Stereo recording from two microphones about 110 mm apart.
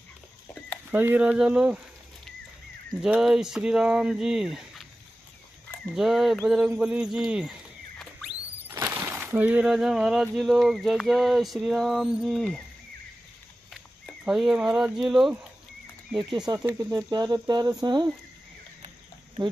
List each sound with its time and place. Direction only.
0.9 s speech: 15° right (ahead or behind)
3.0 s speech: 5° right (ahead or behind)
5.9 s speech: centre (ahead or behind)
8.6 s speech: 20° right (ahead or behind); by 12.4 s centre (ahead or behind)
14.2 s speech: 5° right (ahead or behind)
16.6 s speech: 30° right (ahead or behind)